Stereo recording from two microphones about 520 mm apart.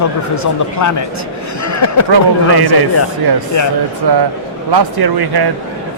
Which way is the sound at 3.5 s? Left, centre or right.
Left.